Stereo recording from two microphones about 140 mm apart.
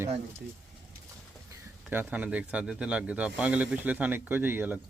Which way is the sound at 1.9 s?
10° right (ahead or behind).